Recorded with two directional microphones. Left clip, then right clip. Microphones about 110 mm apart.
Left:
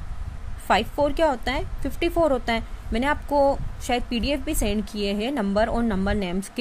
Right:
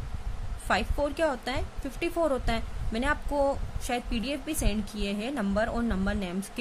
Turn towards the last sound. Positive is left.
turn(degrees=40)  # may be behind; listen again after turning